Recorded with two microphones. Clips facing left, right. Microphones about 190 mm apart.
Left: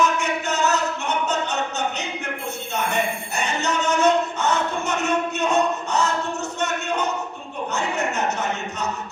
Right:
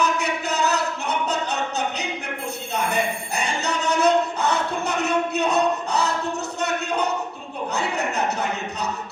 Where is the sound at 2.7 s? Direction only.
35° right (ahead or behind).